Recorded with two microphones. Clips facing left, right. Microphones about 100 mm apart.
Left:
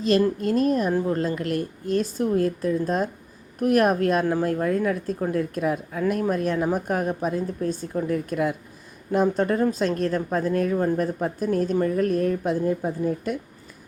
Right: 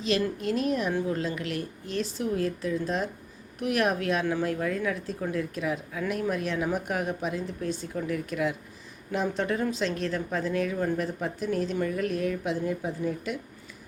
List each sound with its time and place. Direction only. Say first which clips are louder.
0.0 s a woman's voice: left 6 dB; 45° left (ahead or behind)